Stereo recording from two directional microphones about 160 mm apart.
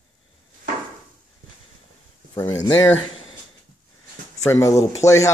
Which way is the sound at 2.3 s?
20° left (ahead or behind).